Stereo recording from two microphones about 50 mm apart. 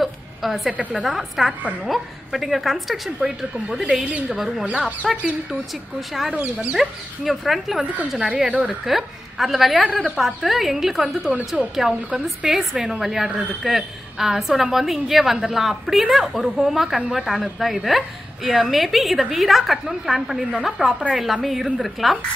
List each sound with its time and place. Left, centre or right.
0.0 s a sound: centre
1.0 s a woman's voice: centre
6.3 s speech: centre
6.8 s a woman's voice: centre
7.8 s a woman's voice: right
8.8 s a woman's voice: centre